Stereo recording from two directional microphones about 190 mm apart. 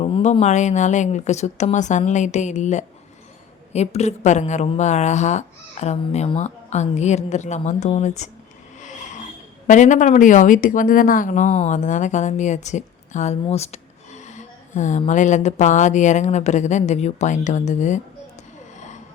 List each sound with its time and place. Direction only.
0.0 s a woman's voice: 35° left (ahead or behind)
8.8 s a sound: 40° left (ahead or behind)
9.6 s a woman's voice: 40° left (ahead or behind)